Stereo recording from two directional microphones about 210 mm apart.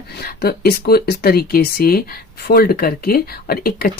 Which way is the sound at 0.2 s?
45° left (ahead or behind).